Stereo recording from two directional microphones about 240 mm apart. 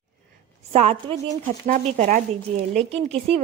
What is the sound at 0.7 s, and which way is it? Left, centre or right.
Speech, right.